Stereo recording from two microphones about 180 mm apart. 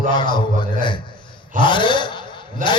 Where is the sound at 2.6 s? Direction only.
45° right (ahead or behind).